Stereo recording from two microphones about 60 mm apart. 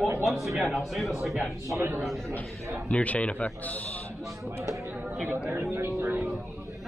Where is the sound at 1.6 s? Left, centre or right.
Right.